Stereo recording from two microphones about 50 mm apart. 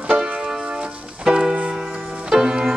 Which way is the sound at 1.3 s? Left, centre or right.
Centre.